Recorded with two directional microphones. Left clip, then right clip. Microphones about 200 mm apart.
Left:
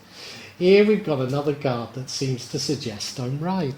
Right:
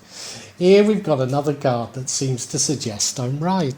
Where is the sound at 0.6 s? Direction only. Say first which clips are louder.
Right 2 dB; 35° right (ahead or behind).